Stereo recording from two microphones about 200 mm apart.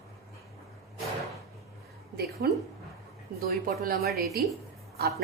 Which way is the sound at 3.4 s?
45° right (ahead or behind).